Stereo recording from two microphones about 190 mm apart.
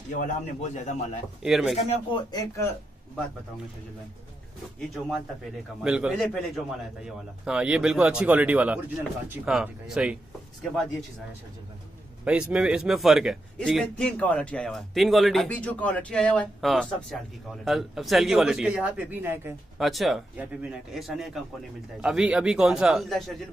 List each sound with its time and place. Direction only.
0.1 s a man's voice: 40° left (ahead or behind)
1.4 s a man's voice: centre (ahead or behind)
2.3 s speech: 15° left (ahead or behind)
4.7 s a man's voice: centre (ahead or behind)
12.3 s a man's voice: 5° right (ahead or behind)
19.8 s a man's voice: centre (ahead or behind)